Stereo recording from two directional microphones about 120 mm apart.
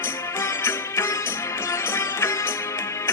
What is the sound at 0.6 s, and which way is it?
Music, 25° left (ahead or behind).